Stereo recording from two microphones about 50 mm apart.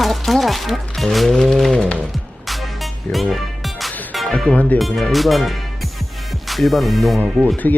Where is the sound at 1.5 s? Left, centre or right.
Centre.